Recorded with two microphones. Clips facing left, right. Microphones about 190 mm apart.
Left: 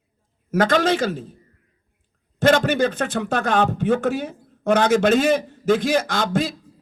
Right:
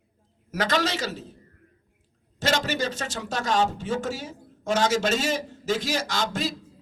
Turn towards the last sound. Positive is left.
turn(degrees=50)  # may be behind; listen again after turning